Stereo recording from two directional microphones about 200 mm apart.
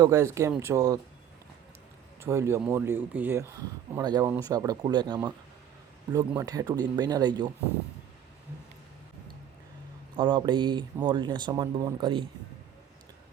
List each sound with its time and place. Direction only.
0.0 s speech: 15° right (ahead or behind)
2.2 s speech: 15° right (ahead or behind)
3.9 s speech: 20° right (ahead or behind)
10.2 s speech: 20° right (ahead or behind)